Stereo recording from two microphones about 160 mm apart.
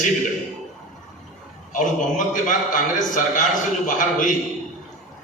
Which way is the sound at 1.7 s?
55° left (ahead or behind).